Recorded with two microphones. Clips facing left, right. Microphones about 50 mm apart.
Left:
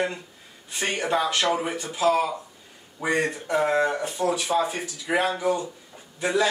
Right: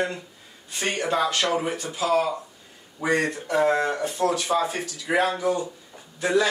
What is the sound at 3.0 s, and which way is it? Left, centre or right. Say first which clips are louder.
Speech: right 1 dB; centre.